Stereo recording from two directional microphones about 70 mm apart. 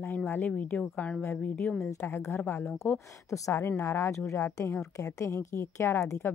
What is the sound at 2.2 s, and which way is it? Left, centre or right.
A woman's voice, left.